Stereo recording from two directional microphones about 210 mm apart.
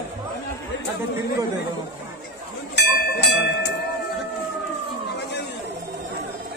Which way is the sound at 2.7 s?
50° left (ahead or behind).